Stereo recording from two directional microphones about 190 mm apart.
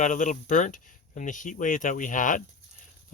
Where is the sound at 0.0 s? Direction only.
40° left (ahead or behind).